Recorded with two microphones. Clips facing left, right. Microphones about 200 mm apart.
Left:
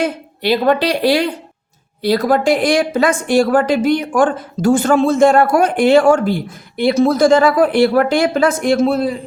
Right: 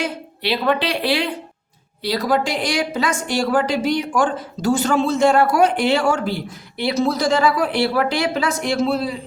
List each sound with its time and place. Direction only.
0.0 s a woman's voice: 45° left (ahead or behind)